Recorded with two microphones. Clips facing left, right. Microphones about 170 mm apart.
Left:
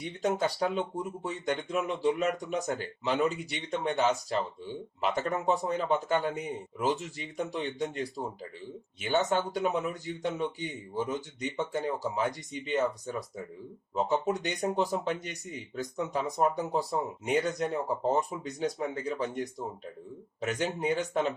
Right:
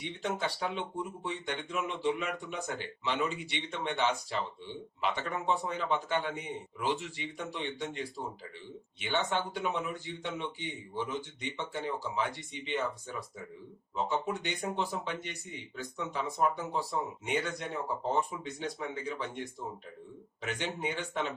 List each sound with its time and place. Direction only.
0.2 s speech: 40° left (ahead or behind)